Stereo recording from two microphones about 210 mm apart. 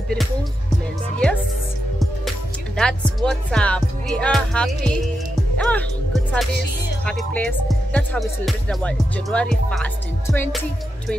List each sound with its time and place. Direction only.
2.8 s speech: centre (ahead or behind)
10.2 s music: 10° left (ahead or behind)